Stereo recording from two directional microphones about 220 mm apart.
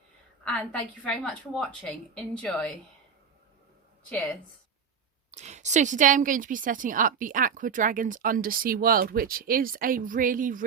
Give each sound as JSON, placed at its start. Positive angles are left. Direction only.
{"t": 0.4, "sound": "a woman's voice", "side_deg": 5}
{"t": 5.3, "sound": "a woman's voice", "side_deg": -30}